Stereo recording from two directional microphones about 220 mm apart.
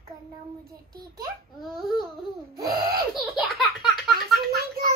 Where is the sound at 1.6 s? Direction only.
Centre (ahead or behind).